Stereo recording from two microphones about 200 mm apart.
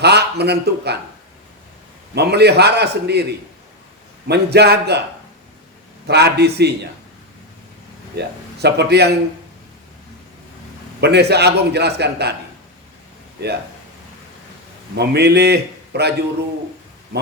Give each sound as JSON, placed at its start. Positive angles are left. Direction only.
{"t": 0.0, "sound": "a man's voice", "side_deg": -55}
{"t": 2.1, "sound": "a man's voice", "side_deg": -55}
{"t": 4.3, "sound": "a man's voice", "side_deg": -55}
{"t": 6.1, "sound": "a man's voice", "side_deg": -55}
{"t": 8.1, "sound": "speech", "side_deg": -55}
{"t": 11.0, "sound": "a man's voice", "side_deg": -55}
{"t": 14.9, "sound": "a man's voice", "side_deg": -55}